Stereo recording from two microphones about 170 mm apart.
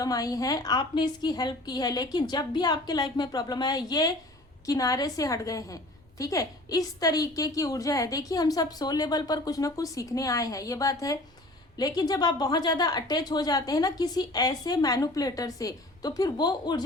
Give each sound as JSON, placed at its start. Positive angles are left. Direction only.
{"t": 0.0, "sound": "a woman's voice", "side_deg": 20}